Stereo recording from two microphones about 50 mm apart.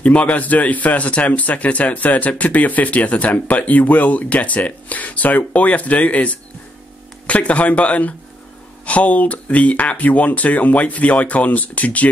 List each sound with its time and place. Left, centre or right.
0.0 s a man's voice: left